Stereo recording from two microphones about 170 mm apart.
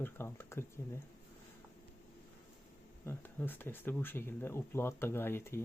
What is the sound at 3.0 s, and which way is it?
Speech, 15° left (ahead or behind).